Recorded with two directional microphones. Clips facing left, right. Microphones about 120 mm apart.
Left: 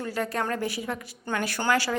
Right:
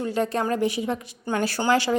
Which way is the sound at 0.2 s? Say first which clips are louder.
Right 5 dB; 20° right (ahead or behind).